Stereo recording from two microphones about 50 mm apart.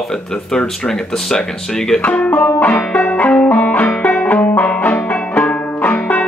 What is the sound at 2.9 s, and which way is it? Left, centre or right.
Music, left.